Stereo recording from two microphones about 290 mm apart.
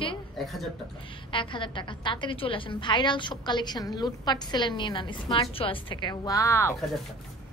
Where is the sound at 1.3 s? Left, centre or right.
Centre.